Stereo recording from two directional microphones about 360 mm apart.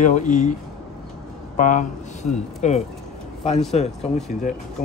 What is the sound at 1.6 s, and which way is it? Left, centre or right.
Speech, left.